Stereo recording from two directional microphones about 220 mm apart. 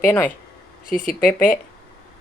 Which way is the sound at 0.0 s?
10° left (ahead or behind).